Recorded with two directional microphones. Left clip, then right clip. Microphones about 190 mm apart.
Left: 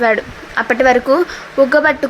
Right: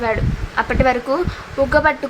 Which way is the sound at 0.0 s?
20° left (ahead or behind).